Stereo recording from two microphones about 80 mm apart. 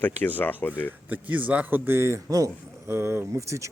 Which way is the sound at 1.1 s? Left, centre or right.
Right.